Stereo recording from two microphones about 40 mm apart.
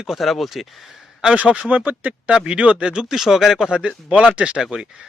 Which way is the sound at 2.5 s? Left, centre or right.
Right.